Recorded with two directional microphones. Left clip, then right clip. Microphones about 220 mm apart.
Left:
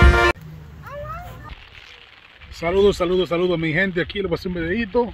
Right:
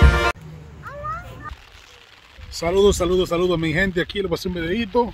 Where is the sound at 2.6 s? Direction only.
10° right (ahead or behind).